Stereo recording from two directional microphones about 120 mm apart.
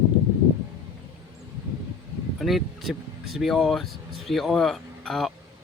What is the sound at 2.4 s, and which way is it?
Speech, centre (ahead or behind).